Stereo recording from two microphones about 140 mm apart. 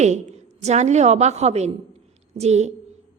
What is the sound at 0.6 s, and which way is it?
A woman's voice, 55° right (ahead or behind).